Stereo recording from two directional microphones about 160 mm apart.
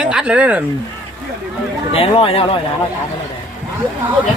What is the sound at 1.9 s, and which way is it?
Speech, 35° left (ahead or behind).